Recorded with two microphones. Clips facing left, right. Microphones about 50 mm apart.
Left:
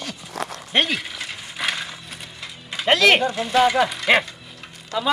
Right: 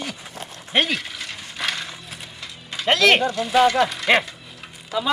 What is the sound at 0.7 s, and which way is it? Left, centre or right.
Mechanisms, centre.